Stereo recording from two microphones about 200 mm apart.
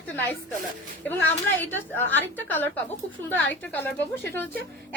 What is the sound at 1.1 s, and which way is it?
A woman's voice, 10° left (ahead or behind).